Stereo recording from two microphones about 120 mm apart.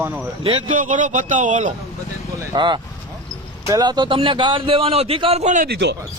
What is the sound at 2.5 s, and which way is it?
A man's voice, 40° right (ahead or behind).